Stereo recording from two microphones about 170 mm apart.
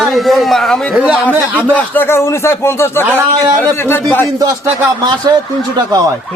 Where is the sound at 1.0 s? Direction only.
10° right (ahead or behind).